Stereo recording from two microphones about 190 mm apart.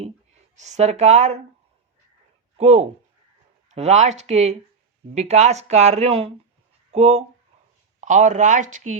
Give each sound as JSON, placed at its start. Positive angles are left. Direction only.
{"t": 0.5, "sound": "speech", "side_deg": -35}
{"t": 2.6, "sound": "speech", "side_deg": -35}